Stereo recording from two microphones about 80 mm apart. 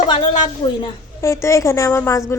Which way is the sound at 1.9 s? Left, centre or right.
Left.